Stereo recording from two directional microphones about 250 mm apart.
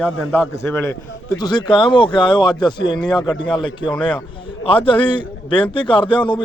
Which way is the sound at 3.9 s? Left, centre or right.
Centre.